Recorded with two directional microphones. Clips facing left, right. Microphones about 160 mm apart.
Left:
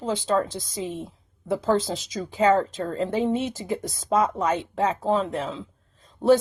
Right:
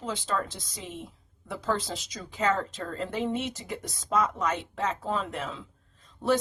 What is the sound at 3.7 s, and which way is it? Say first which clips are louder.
Speech: left 6 dB; 30° left (ahead or behind).